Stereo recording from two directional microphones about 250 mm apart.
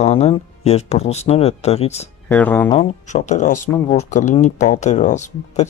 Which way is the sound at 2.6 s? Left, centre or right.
Left.